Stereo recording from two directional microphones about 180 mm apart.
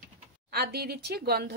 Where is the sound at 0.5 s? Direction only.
60° right (ahead or behind).